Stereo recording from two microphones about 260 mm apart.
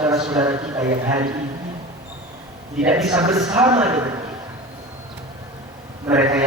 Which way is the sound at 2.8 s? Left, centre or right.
Centre.